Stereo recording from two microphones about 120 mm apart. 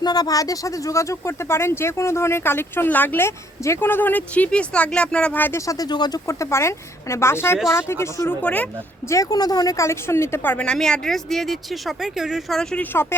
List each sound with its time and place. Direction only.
0.0 s speech: 35° left (ahead or behind)
8.4 s speech: 10° left (ahead or behind)
9.0 s speech: 30° left (ahead or behind); by 12.8 s 5° left (ahead or behind)
12.8 s speech: 20° left (ahead or behind)